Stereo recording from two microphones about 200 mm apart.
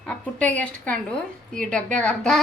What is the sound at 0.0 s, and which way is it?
A woman's voice, 5° left (ahead or behind).